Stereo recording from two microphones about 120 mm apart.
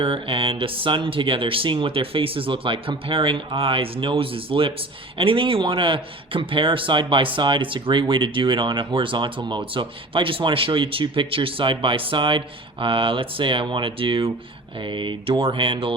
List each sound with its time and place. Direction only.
0.0 s speech: 50° right (ahead or behind)